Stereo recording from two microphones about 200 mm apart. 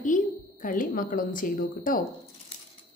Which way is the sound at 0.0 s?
40° left (ahead or behind).